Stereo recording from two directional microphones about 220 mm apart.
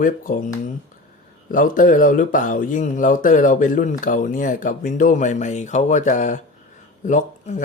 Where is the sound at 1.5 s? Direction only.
40° left (ahead or behind).